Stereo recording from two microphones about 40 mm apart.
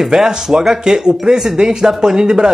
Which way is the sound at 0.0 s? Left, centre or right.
Centre.